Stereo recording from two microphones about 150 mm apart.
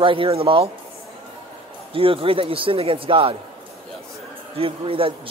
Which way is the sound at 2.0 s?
40° right (ahead or behind).